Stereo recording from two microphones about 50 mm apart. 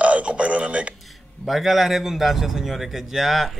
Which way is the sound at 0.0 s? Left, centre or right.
Right.